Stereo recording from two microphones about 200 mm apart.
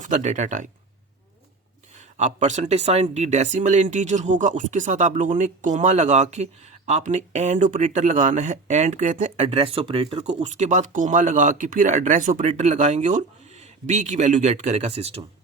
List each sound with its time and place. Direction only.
0.0 s speech: 35° right (ahead or behind)
2.0 s speech: 35° right (ahead or behind)